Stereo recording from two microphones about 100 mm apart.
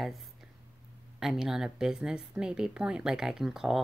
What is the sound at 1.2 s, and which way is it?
Speech, 5° right (ahead or behind).